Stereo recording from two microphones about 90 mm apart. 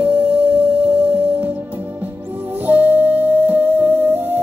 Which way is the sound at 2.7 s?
20° right (ahead or behind).